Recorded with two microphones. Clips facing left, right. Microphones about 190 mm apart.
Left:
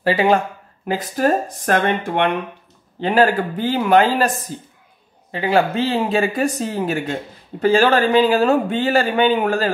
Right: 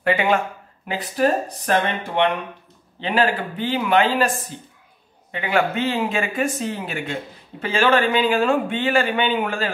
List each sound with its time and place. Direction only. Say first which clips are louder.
0.0 s speech: left 3 dB; 35° left (ahead or behind)